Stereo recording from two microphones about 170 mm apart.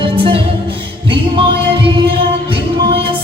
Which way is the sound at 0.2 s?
30° right (ahead or behind).